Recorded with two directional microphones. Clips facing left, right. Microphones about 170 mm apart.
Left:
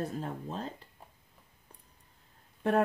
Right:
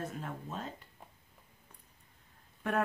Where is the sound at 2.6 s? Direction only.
30° left (ahead or behind).